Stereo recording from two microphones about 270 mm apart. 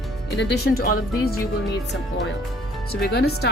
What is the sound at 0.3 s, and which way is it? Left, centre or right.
Speech, left.